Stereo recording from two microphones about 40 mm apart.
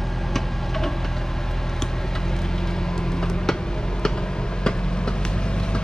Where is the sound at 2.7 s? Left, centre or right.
Centre.